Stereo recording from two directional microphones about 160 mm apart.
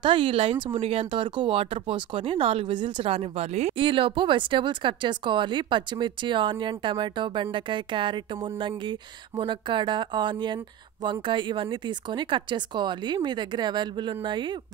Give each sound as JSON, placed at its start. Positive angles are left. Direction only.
{"t": 0.0, "sound": "speech", "side_deg": -30}